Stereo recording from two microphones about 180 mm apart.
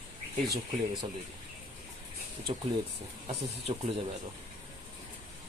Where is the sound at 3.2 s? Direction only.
30° right (ahead or behind).